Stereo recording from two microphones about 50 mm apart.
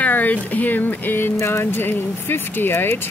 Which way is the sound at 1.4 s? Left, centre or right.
Left.